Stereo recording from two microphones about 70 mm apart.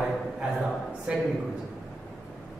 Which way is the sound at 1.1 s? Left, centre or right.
Centre.